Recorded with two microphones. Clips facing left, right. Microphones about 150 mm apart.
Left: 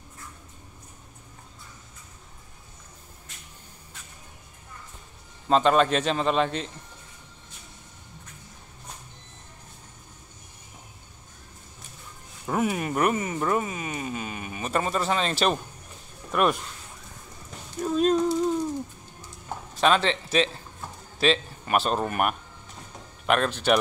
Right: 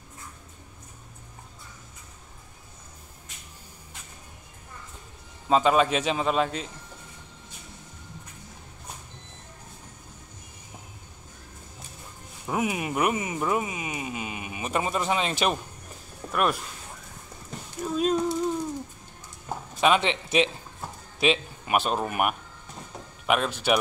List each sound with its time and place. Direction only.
5.5 s a man's voice: 5° right (ahead or behind)
12.4 s speech: 10° right (ahead or behind)
17.8 s a sound: 5° right (ahead or behind)
19.8 s a man's voice: 15° right (ahead or behind)